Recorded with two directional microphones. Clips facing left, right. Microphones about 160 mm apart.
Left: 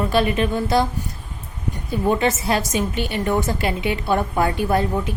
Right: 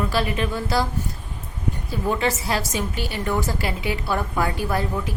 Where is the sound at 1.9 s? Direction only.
20° left (ahead or behind).